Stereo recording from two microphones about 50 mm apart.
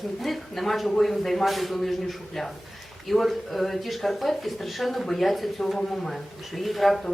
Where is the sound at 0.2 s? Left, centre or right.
Centre.